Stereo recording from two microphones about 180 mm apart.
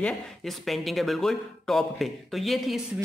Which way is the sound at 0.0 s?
Centre (ahead or behind).